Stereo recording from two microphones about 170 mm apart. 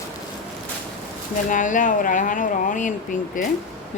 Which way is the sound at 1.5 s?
50° left (ahead or behind).